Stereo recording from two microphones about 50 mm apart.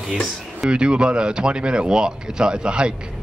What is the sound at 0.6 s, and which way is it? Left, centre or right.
A man's voice, centre.